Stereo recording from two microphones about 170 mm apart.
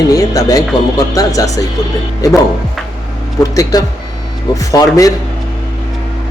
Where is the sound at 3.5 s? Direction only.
20° left (ahead or behind).